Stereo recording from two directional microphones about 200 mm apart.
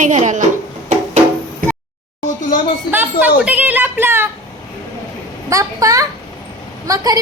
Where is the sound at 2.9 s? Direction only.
10° right (ahead or behind).